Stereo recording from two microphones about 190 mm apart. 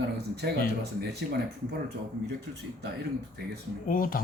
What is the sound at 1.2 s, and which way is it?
Speech, 55° right (ahead or behind).